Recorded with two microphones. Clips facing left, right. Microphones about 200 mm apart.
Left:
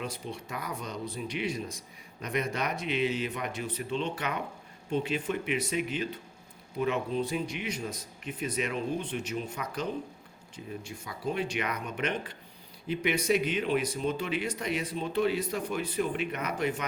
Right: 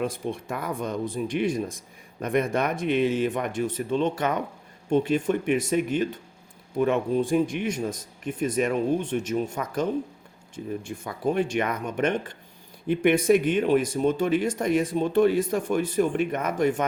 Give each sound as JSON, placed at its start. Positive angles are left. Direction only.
{"t": 0.0, "sound": "speech", "side_deg": -50}